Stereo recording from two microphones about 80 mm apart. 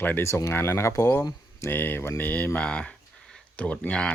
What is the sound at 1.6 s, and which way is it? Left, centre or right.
Speech, left.